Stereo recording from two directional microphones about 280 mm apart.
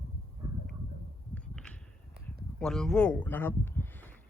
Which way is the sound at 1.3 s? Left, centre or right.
Centre.